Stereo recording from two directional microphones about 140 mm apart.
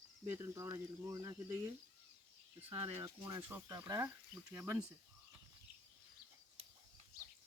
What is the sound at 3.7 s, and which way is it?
Speech, 25° right (ahead or behind).